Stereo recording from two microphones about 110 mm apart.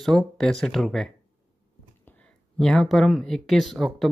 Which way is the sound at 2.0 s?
15° left (ahead or behind).